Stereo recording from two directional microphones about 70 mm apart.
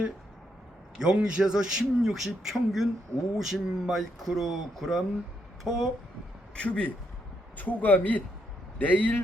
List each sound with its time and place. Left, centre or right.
0.9 s a man's voice: centre
6.6 s a man's voice: centre